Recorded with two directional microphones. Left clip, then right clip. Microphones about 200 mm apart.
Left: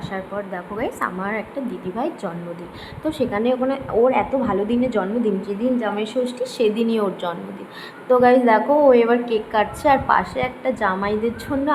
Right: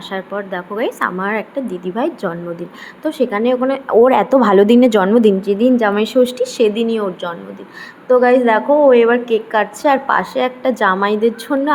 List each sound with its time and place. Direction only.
0.1 s a woman's voice: 25° right (ahead or behind)
4.0 s a woman's voice: 45° right (ahead or behind)
6.4 s a woman's voice: 15° right (ahead or behind)